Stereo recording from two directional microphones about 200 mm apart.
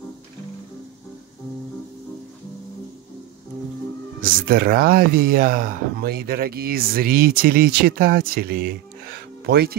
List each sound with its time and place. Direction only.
4.2 s speech: 50° right (ahead or behind)